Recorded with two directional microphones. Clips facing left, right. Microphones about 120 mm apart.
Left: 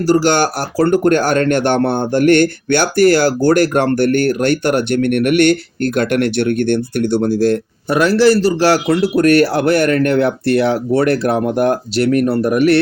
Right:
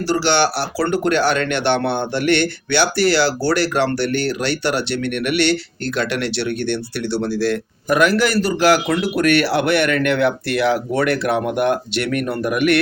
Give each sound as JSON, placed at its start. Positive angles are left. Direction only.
{"t": 0.1, "sound": "speech", "side_deg": 45}
{"t": 7.9, "sound": "speech", "side_deg": 30}